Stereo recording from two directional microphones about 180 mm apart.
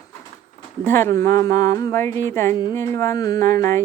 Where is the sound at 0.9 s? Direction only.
15° left (ahead or behind).